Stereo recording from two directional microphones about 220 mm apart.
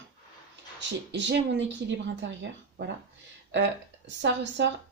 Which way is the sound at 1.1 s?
55° right (ahead or behind).